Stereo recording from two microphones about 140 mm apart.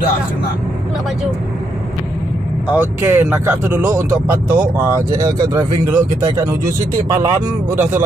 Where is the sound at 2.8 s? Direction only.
20° right (ahead or behind).